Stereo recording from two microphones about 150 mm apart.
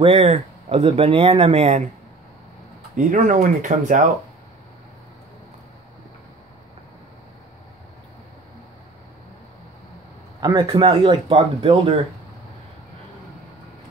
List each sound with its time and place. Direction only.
0.0 s speech: 45° right (ahead or behind)
3.0 s speech: 60° right (ahead or behind)
10.4 s speech: 25° right (ahead or behind)